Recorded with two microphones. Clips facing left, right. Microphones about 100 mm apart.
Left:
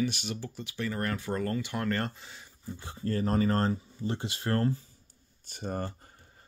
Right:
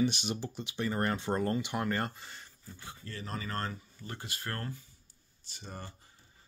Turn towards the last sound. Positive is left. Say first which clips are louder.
# left 11 dB
turn(degrees=50)  # may be behind; listen again after turning